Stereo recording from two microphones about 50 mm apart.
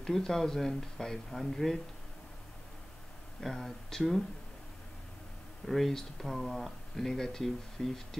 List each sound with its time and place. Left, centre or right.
0.0 s speech: centre
3.3 s speech: centre
5.7 s speech: centre